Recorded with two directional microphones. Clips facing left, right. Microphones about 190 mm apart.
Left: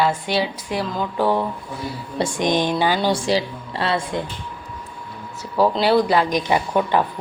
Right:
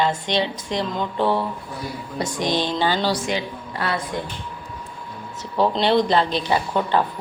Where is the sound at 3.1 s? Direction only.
30° left (ahead or behind).